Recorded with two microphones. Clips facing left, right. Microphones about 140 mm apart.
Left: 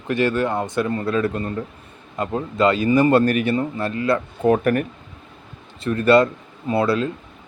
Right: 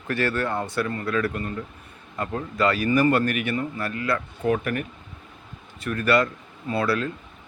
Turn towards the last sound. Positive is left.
turn(degrees=25)  # may be behind; listen again after turning